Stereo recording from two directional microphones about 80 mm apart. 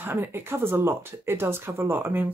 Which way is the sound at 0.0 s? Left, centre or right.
Right.